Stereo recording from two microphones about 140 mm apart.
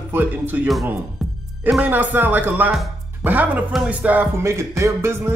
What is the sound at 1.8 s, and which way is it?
Music, 15° right (ahead or behind).